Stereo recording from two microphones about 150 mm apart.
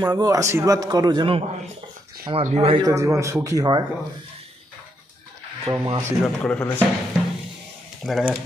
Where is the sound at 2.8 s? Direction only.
20° right (ahead or behind).